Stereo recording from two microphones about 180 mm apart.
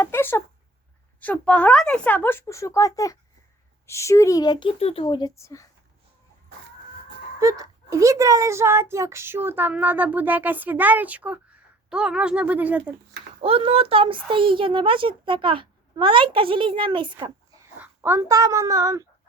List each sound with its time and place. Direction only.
0.0 s a sound: 10° left (ahead or behind)
1.2 s speech: 5° left (ahead or behind)
7.3 s a child's voice: 20° right (ahead or behind)
13.4 s a child's voice: 30° right (ahead or behind)
17.7 s a child's voice: 10° right (ahead or behind)